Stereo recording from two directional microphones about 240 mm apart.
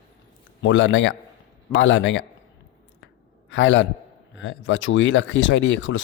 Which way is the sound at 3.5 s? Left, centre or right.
Left.